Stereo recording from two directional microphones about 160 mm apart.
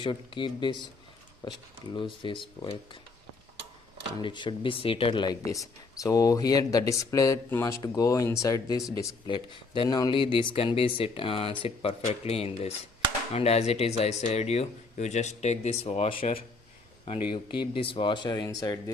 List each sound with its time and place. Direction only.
0.0 s speech: 30° left (ahead or behind)
4.2 s speech: 30° left (ahead or behind)